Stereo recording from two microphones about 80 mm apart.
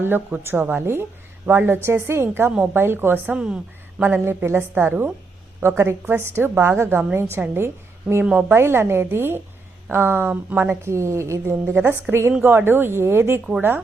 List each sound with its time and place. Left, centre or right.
0.0 s a woman's voice: right
0.8 s a woman's voice: right
3.2 s speech: centre
4.0 s a woman's voice: right
8.2 s a woman's voice: centre
8.4 s a woman's voice: right
10.8 s a woman's voice: right